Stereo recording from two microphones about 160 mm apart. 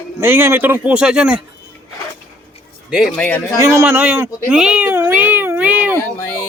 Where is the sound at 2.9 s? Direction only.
5° right (ahead or behind).